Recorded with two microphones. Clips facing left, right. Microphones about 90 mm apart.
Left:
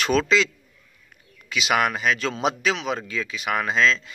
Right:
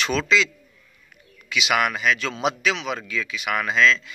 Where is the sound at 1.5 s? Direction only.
40° left (ahead or behind).